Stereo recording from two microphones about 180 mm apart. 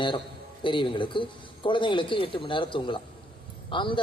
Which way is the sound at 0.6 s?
25° left (ahead or behind).